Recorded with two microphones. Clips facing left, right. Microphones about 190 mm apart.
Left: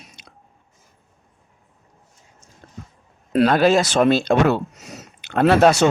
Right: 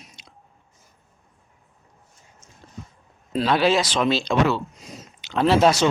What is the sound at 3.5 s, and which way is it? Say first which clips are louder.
Speech: even; 45° left (ahead or behind).